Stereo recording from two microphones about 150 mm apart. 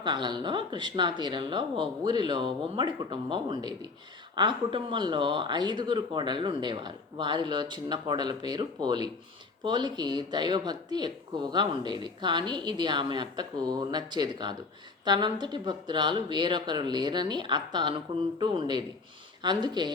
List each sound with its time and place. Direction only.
0.0 s speech: 30° right (ahead or behind)